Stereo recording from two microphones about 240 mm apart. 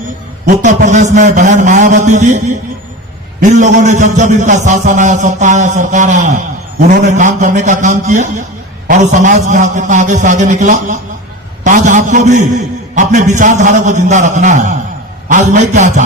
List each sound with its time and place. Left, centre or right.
0.4 s a man's voice: right